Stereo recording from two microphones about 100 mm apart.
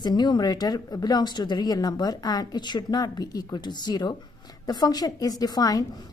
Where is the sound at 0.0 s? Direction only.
45° left (ahead or behind).